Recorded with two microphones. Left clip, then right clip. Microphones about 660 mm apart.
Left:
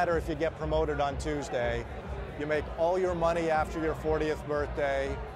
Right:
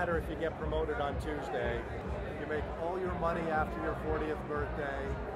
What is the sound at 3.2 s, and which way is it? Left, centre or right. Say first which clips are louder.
Speech: left 3 dB; left.